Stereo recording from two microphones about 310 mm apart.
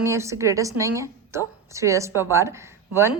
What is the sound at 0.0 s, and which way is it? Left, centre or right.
A woman's voice, centre.